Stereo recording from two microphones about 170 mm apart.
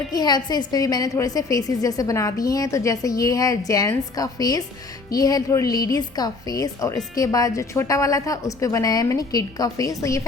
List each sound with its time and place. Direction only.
0.1 s a woman's voice: 25° left (ahead or behind)